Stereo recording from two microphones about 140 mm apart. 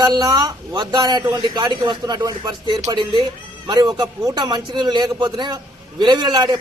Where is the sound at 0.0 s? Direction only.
30° right (ahead or behind).